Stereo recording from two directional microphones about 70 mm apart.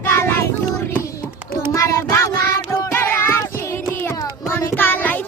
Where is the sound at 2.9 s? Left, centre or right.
Left.